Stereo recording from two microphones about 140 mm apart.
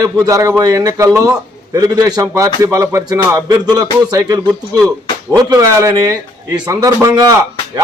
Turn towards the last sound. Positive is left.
turn(degrees=-25)  # may be behind; listen again after turning